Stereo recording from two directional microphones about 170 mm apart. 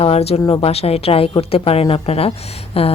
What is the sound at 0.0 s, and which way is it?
Speech, 35° left (ahead or behind).